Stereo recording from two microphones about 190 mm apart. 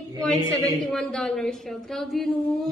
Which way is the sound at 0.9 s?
5° left (ahead or behind).